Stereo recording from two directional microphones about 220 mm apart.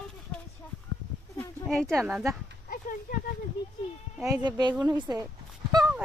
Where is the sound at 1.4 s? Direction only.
Centre (ahead or behind).